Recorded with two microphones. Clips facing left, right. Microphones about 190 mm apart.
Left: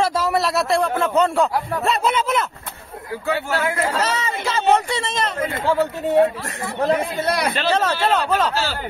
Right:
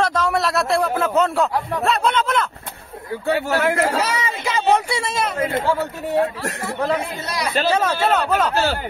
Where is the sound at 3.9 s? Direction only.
10° right (ahead or behind).